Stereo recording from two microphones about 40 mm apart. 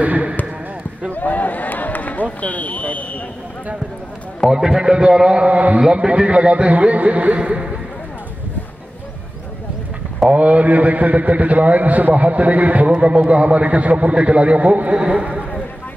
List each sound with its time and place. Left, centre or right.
0.0 s basketball bounce: right
1.1 s a sound: left
2.4 s speech: left
4.5 s a man's voice: centre
5.5 s a man's voice: right
5.8 s a man's voice: right
7.3 s a man's voice: right
10.3 s a man's voice: right